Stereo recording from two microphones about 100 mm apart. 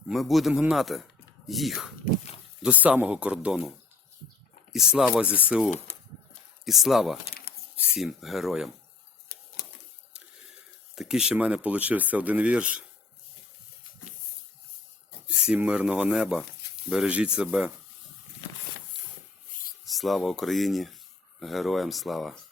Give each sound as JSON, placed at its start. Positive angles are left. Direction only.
{"t": 0.1, "sound": "speech", "side_deg": 0}
{"t": 2.6, "sound": "speech", "side_deg": -15}
{"t": 4.7, "sound": "speech", "side_deg": -5}
{"t": 5.2, "sound": "speech", "side_deg": -15}
{"t": 10.9, "sound": "speech", "side_deg": -5}
{"t": 15.3, "sound": "speech", "side_deg": -10}
{"t": 19.8, "sound": "speech", "side_deg": 0}